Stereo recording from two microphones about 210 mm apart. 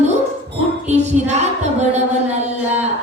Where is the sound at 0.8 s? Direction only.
30° right (ahead or behind).